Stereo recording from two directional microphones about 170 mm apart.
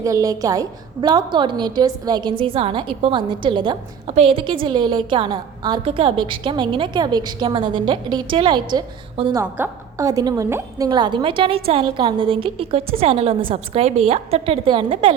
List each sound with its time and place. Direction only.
0.0 s a woman's voice: 20° right (ahead or behind)
9.4 s a woman's voice: 15° right (ahead or behind)